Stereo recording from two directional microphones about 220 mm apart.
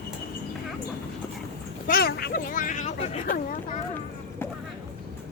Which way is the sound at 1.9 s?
45° left (ahead or behind).